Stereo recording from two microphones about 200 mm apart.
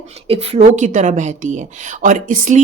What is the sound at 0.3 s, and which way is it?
Speech, 30° right (ahead or behind).